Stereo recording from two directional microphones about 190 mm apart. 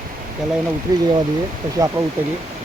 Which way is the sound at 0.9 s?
20° right (ahead or behind).